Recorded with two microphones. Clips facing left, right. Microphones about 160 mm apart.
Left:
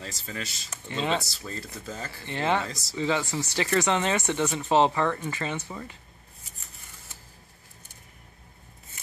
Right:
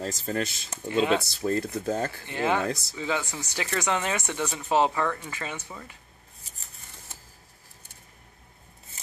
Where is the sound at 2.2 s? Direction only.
10° right (ahead or behind).